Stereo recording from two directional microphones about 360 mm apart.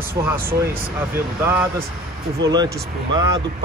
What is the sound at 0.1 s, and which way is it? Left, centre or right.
Speech, centre.